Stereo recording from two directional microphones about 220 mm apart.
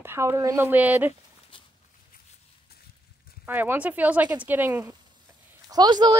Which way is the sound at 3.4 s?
10° right (ahead or behind).